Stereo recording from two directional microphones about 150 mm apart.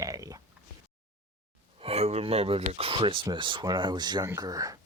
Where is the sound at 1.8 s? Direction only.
45° right (ahead or behind).